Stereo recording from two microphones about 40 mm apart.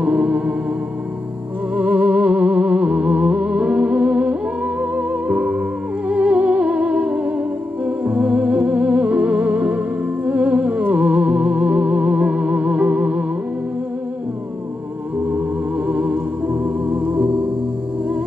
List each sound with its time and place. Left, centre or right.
0.0 s music: right
1.8 s music: right
15.9 s music: right